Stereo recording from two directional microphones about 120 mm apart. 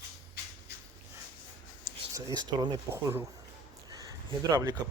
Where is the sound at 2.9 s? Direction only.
20° right (ahead or behind).